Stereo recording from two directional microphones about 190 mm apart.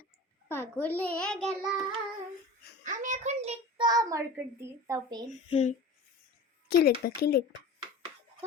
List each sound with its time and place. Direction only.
0.4 s a child's voice: 10° left (ahead or behind)
2.8 s child singing: 40° right (ahead or behind)
3.8 s a child's voice: 20° right (ahead or behind)
5.5 s speech: 35° left (ahead or behind)
6.7 s speech: 55° left (ahead or behind)